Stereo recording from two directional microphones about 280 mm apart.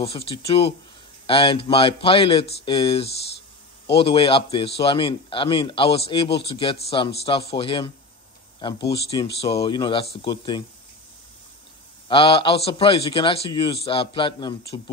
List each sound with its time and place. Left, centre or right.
0.0 s a man's voice: centre
12.1 s a man's voice: centre